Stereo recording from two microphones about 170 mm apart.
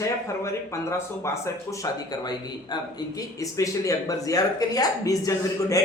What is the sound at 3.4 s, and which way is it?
A man's voice, 20° left (ahead or behind).